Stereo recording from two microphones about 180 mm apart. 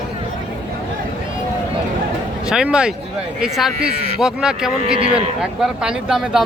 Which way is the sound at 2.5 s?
5° right (ahead or behind).